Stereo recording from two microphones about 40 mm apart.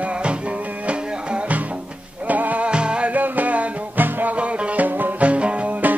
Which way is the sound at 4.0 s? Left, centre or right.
Right.